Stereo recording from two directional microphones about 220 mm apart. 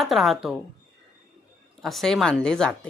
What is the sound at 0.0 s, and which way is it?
Speech, centre (ahead or behind).